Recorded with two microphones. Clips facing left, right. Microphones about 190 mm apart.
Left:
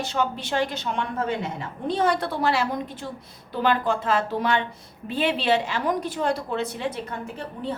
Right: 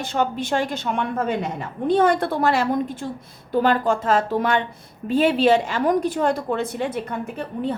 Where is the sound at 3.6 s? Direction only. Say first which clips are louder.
Right 1 dB; 45° right (ahead or behind).